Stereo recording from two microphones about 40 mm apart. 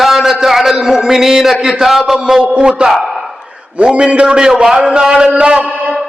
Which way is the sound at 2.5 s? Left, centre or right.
Right.